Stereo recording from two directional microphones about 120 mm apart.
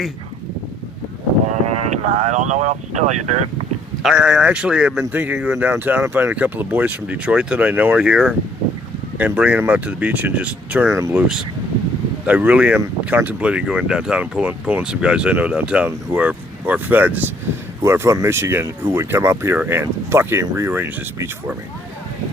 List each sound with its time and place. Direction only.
1.6 s speech: 70° right (ahead or behind)
4.0 s speech: 5° right (ahead or behind); by 11.2 s 25° right (ahead or behind)
12.2 s speech: 10° right (ahead or behind)